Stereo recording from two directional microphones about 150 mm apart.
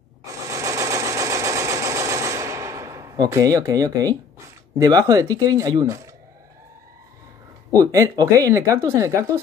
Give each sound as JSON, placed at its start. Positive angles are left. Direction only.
{"t": 0.2, "sound": "sewing machine", "side_deg": -20}
{"t": 4.7, "sound": "speech", "side_deg": -25}
{"t": 7.7, "sound": "speech", "side_deg": -25}